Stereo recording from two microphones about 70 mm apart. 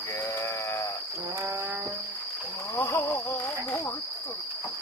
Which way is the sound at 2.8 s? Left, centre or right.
Left.